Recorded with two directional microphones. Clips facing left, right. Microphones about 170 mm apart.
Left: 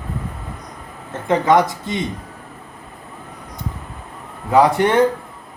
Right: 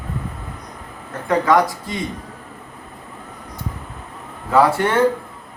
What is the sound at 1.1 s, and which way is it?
Speech, 20° left (ahead or behind).